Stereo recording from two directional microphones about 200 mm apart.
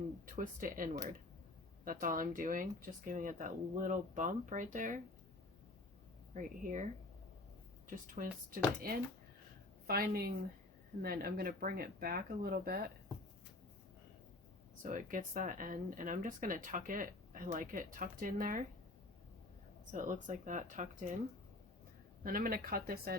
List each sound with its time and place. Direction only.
0.3 s speech: 45° right (ahead or behind)
6.3 s speech: 40° right (ahead or behind)
14.8 s speech: 40° right (ahead or behind)
19.9 s speech: 40° right (ahead or behind)
22.2 s speech: 45° right (ahead or behind)